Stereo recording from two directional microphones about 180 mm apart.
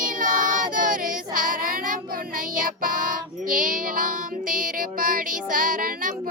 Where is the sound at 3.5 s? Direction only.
50° right (ahead or behind).